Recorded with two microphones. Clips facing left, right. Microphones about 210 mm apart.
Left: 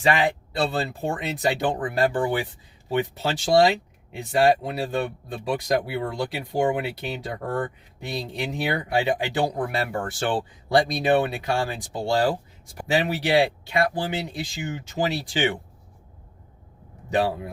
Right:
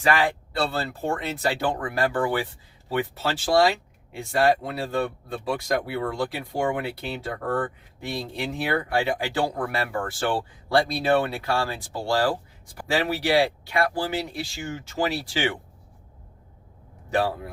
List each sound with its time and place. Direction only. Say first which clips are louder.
0.0 s speech: left 1 dB; 20° left (ahead or behind)
17.1 s speech: left 1 dB; 20° left (ahead or behind)